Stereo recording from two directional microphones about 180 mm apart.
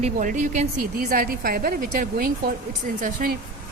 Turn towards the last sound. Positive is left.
turn(degrees=-55)  # may be behind; listen again after turning